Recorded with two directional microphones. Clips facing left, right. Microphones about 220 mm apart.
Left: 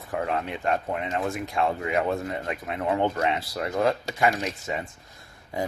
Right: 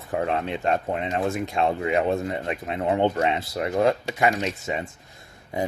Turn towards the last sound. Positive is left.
turn(degrees=-20)  # may be behind; listen again after turning